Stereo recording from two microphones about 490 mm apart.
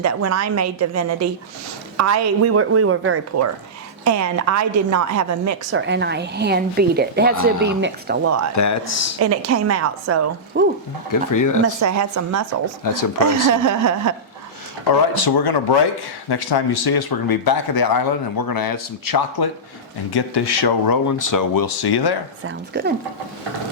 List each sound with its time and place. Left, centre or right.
0.0 s a woman's voice: right
5.8 s a woman's voice: right
8.5 s speech: left
9.1 s a woman's voice: right
11.1 s speech: left
11.6 s a woman's voice: right
12.8 s speech: left
13.5 s a woman's voice: right
15.1 s speech: left
22.4 s a woman's voice: right